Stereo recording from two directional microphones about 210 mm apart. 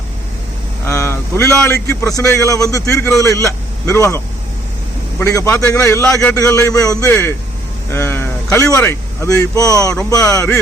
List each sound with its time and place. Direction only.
0.9 s a man's voice: 10° left (ahead or behind)
5.2 s a man's voice: 15° left (ahead or behind)